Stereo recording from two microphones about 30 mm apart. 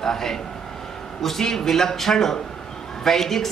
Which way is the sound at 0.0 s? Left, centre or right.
Centre.